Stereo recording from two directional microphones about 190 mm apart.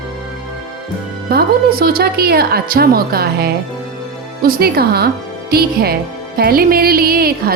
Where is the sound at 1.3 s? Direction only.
50° right (ahead or behind).